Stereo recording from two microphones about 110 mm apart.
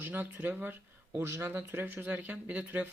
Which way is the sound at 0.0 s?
15° right (ahead or behind).